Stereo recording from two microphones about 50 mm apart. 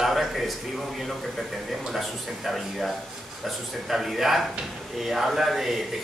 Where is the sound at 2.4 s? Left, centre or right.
Centre.